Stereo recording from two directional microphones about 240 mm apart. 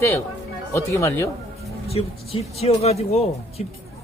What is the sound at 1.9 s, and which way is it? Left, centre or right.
Speech, left.